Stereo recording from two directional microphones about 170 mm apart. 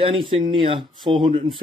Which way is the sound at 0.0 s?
30° right (ahead or behind).